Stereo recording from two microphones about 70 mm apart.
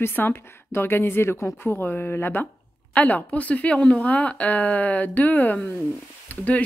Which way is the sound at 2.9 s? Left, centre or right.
Left.